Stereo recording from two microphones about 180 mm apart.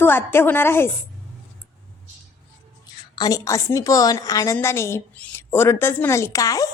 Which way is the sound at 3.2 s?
20° left (ahead or behind).